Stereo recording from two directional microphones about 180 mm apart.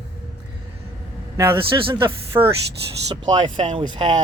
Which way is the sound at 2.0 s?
15° right (ahead or behind).